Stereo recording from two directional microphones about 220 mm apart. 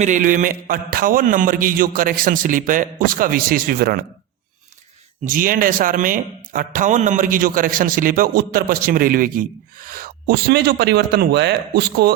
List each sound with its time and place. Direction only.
0.0 s a man's voice: 35° right (ahead or behind)
5.2 s a man's voice: 40° right (ahead or behind)